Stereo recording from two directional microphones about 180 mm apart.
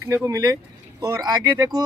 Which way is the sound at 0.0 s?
15° right (ahead or behind).